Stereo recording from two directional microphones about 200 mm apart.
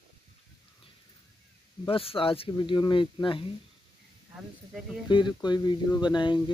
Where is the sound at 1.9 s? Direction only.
30° left (ahead or behind).